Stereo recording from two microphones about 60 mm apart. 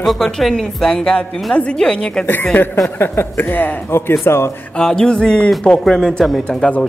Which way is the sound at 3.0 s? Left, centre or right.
Left.